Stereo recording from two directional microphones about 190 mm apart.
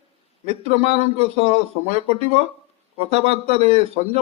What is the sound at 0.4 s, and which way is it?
Speech, 35° right (ahead or behind).